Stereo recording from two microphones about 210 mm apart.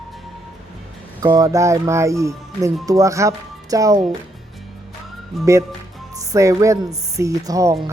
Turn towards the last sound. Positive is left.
turn(degrees=-15)  # may be behind; listen again after turning